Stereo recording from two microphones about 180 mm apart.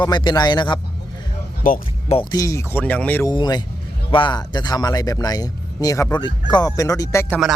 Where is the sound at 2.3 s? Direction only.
20° left (ahead or behind).